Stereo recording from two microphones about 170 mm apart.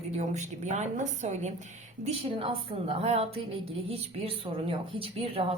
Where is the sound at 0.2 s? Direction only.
45° right (ahead or behind).